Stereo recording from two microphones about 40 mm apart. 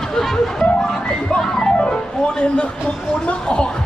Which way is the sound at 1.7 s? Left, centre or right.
Left.